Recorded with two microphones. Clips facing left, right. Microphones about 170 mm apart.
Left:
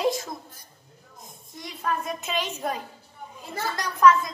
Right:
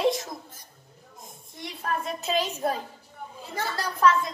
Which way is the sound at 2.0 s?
35° right (ahead or behind).